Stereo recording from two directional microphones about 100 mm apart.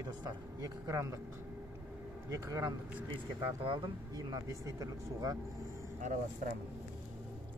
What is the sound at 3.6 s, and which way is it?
Speech, 60° right (ahead or behind).